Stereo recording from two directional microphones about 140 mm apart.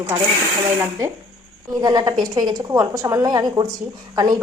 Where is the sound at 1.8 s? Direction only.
30° right (ahead or behind).